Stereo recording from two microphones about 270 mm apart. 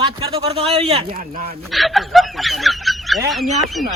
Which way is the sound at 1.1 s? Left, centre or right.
Right.